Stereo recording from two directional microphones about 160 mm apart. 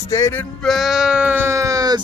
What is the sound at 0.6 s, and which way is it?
Speech, centre (ahead or behind).